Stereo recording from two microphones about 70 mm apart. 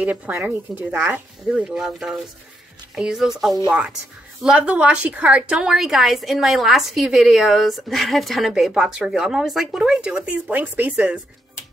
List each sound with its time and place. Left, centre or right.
0.0 s speech: right
1.5 s a woman's voice: centre
10.1 s speech: right